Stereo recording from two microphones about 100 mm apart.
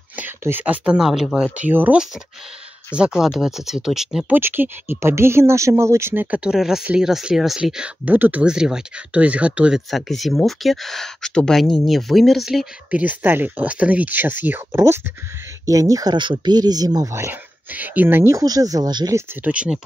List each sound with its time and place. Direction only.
0.1 s speech: 20° right (ahead or behind)
3.0 s speech: 5° right (ahead or behind)
4.3 s speech: 20° right (ahead or behind)
6.3 s speech: 10° right (ahead or behind)
12.9 s speech: 15° right (ahead or behind)
15.6 s speech: 35° right (ahead or behind)
17.6 s speech: 15° right (ahead or behind); by 19.1 s 45° right (ahead or behind)
19.4 s speech: 10° right (ahead or behind)